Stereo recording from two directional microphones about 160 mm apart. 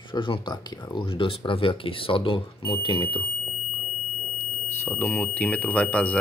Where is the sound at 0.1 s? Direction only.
30° left (ahead or behind).